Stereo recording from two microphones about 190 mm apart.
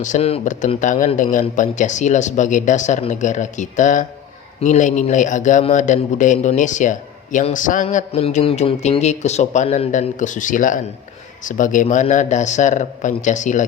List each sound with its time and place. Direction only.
0.0 s a man's voice: 35° left (ahead or behind)